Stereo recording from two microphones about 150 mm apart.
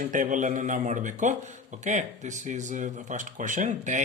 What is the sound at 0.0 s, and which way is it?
Speech, 60° right (ahead or behind).